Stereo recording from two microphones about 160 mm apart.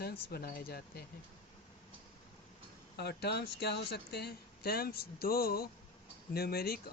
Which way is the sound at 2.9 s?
90° left.